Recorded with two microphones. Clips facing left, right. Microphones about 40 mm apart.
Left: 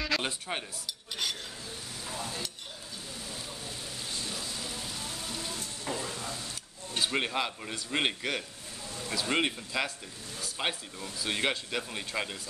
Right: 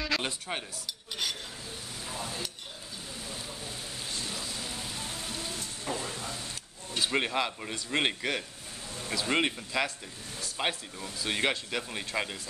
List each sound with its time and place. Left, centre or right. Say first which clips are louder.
0.0 s cutlery: even; centre
2.0 s stir: even; centre
3.3 s rain on surface: right 1 dB; centre
4.2 s a sound: even; centre
5.0 s rain: even; right
6.0 s a sound: even; centre
7.1 s speech: right 2 dB; centre